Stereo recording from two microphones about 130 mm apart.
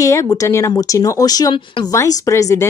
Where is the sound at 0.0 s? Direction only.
25° left (ahead or behind).